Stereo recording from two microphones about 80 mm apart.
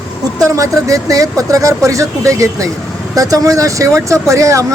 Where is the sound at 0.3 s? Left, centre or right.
Right.